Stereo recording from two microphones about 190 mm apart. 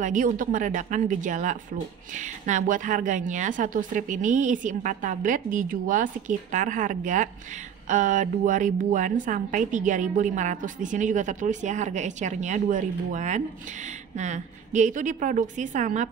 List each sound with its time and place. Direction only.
0.0 s speech: 45° right (ahead or behind)